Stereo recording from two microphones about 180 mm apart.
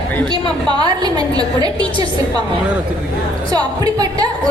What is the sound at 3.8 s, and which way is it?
Speech, 20° right (ahead or behind).